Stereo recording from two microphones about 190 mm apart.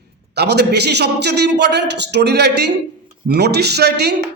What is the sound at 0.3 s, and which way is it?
A man's voice, 60° right (ahead or behind).